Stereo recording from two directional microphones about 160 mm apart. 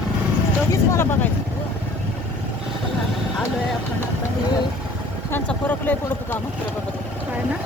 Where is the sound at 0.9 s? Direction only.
15° left (ahead or behind).